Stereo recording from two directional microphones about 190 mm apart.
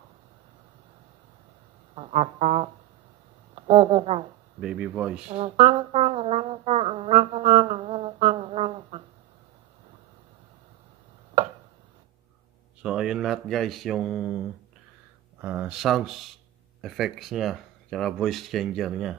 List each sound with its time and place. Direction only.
2.0 s music: 30° right (ahead or behind)
3.5 s speech: 30° right (ahead or behind)
4.6 s speech: 5° right (ahead or behind)
5.3 s a sound: 30° right (ahead or behind)
12.8 s speech: 5° right (ahead or behind)
15.4 s speech: 10° right (ahead or behind)